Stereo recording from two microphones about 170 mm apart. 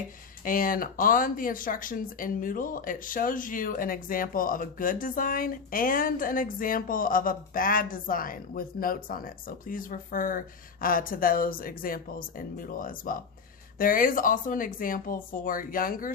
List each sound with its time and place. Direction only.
0.4 s speech: 55° left (ahead or behind)